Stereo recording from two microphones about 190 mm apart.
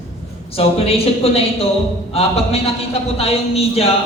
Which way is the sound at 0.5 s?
30° left (ahead or behind).